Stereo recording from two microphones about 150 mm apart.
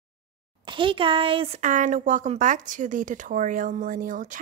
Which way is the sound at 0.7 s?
35° right (ahead or behind).